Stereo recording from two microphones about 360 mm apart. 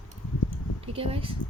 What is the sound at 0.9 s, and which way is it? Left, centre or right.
Speech, centre.